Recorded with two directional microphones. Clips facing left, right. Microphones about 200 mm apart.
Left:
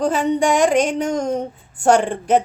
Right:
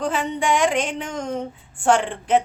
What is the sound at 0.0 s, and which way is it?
A woman's voice, 40° left (ahead or behind).